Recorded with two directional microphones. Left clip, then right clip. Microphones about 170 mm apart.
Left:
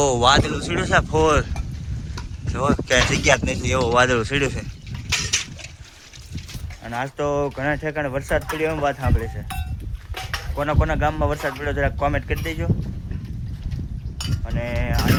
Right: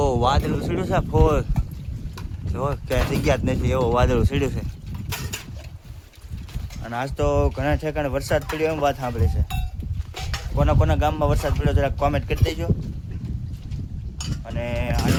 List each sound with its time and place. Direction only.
0.0 s speech: 5° left (ahead or behind)
2.5 s speech: 5° left (ahead or behind)
5.1 s a sound: 65° right (ahead or behind)
6.8 s speech: 10° right (ahead or behind)
7.2 s speech: centre (ahead or behind)
10.6 s speech: centre (ahead or behind)
14.4 s speech: 5° right (ahead or behind)